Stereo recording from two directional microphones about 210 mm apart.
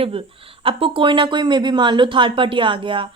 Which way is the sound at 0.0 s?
25° right (ahead or behind).